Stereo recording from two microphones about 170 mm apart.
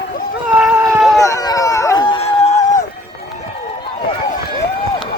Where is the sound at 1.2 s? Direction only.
20° left (ahead or behind).